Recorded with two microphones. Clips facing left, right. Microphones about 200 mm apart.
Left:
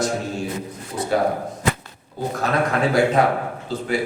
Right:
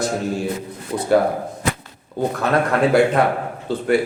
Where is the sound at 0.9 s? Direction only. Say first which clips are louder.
Right 3 dB; 90° right.